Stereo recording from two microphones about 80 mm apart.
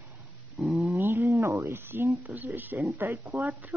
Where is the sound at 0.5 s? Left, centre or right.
Centre.